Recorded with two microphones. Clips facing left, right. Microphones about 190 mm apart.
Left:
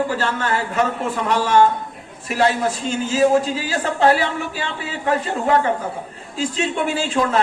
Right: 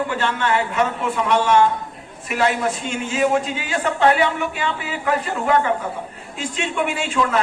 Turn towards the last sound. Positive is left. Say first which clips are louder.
# left 1 dB
turn(degrees=35)  # may be behind; listen again after turning